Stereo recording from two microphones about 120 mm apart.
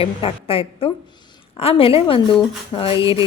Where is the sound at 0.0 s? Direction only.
50° left (ahead or behind).